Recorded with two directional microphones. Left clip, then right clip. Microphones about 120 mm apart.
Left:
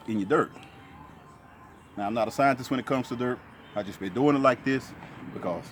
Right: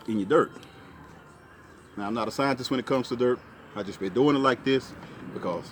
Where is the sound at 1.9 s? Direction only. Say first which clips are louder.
Left 2 dB; 35° left (ahead or behind).